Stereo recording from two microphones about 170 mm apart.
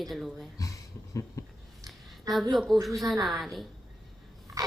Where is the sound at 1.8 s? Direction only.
Centre (ahead or behind).